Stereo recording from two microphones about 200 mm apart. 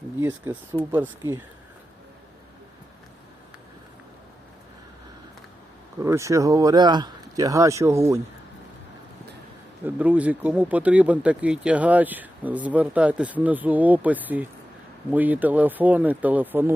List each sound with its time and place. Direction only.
0.2 s speech: 10° right (ahead or behind)
6.0 s speech: 15° right (ahead or behind)
9.8 s speech: 10° right (ahead or behind)